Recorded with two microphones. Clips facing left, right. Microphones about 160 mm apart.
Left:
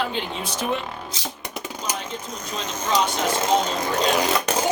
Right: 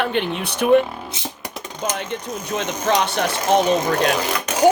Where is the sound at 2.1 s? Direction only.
70° right (ahead or behind).